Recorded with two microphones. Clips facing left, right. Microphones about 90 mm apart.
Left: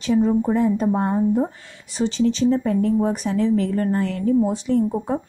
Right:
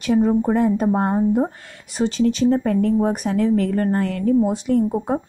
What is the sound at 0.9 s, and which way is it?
Speech, 40° right (ahead or behind).